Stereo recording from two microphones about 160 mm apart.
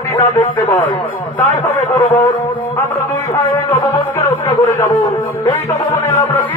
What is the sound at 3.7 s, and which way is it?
Music, 45° left (ahead or behind).